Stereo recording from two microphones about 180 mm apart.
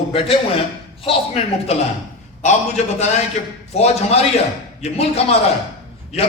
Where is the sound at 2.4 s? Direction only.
40° left (ahead or behind).